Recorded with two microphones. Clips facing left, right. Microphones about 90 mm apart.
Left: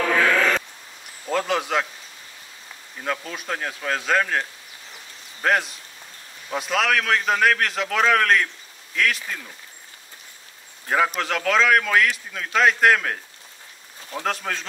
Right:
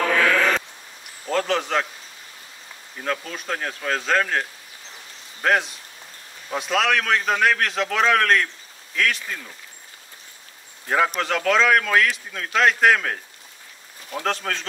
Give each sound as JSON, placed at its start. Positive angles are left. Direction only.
{"t": 1.2, "sound": "a man's voice", "side_deg": 5}
{"t": 3.0, "sound": "speech", "side_deg": 5}
{"t": 10.9, "sound": "speech", "side_deg": 0}